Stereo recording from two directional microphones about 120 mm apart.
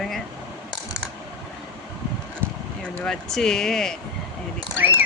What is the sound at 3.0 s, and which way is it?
Speech, 5° left (ahead or behind).